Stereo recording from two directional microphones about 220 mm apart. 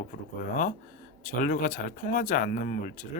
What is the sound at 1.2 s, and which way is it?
Speech, 35° left (ahead or behind).